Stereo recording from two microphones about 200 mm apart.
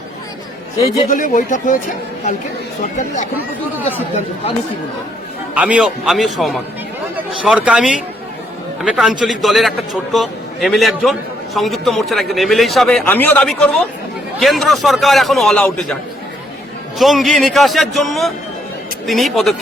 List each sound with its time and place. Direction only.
0.8 s speech: 35° left (ahead or behind)
2.8 s speech: 35° left (ahead or behind)
5.5 s a man's voice: 5° right (ahead or behind)
17.0 s a man's voice: centre (ahead or behind)